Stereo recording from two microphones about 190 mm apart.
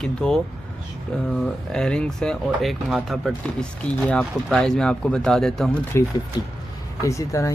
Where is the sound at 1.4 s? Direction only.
5° left (ahead or behind).